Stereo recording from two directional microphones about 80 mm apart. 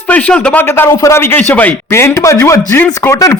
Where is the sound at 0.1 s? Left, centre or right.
Centre.